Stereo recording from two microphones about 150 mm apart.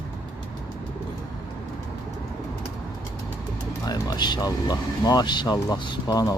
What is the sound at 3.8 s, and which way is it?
Speech, 25° left (ahead or behind).